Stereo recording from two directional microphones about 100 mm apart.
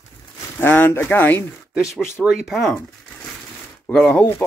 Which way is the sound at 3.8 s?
10° left (ahead or behind).